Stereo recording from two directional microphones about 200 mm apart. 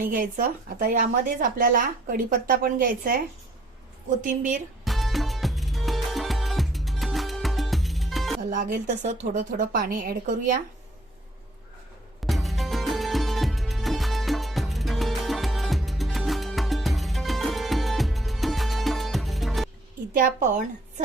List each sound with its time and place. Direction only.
0.0 s speech: 45° right (ahead or behind)
4.2 s a woman's voice: 40° right (ahead or behind)
4.9 s music: centre (ahead or behind)
8.4 s a woman's voice: 40° right (ahead or behind)
12.2 s music: centre (ahead or behind)
20.1 s a woman's voice: 40° right (ahead or behind)